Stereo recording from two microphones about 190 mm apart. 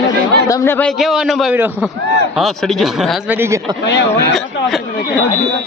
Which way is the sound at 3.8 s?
65° left (ahead or behind).